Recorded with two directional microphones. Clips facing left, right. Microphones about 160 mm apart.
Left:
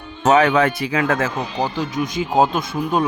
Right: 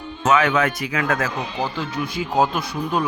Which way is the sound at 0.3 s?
35° left (ahead or behind).